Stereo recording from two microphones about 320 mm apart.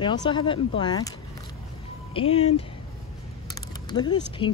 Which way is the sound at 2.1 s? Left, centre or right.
Centre.